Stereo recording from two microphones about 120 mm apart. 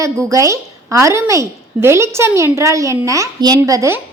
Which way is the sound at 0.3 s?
25° right (ahead or behind).